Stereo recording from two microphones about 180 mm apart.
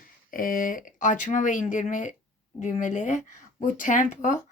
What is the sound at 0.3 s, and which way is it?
Speech, 50° left (ahead or behind).